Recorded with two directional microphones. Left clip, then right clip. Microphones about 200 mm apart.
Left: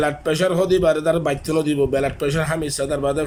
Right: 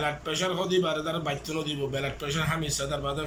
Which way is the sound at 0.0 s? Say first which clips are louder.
Left 9 dB; 45° left (ahead or behind).